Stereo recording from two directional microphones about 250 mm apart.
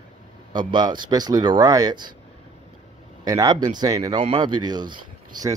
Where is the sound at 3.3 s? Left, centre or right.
Centre.